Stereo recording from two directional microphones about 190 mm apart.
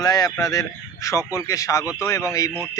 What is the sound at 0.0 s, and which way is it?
A man's voice, 20° left (ahead or behind).